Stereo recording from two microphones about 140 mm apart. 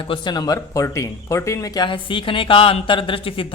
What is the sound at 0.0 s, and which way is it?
Speech, 35° left (ahead or behind).